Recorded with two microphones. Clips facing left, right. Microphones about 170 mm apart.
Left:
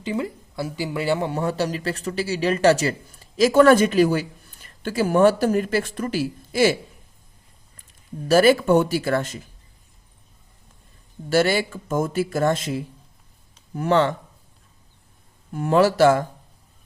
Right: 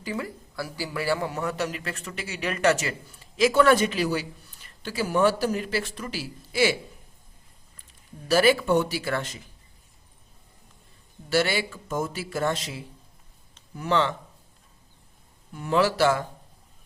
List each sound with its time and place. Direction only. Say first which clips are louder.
0.0 s speech: left 6 dB; 20° left (ahead or behind); by 6.7 s 45° left (ahead or behind)
8.3 s speech: left 5 dB; 45° left (ahead or behind)
11.3 s speech: left 5 dB; 45° left (ahead or behind)
15.5 s speech: left 5 dB; 45° left (ahead or behind)